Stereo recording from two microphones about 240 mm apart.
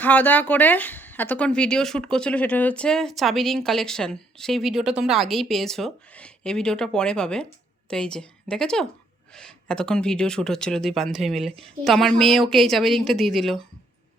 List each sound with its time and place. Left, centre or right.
0.0 s speech: centre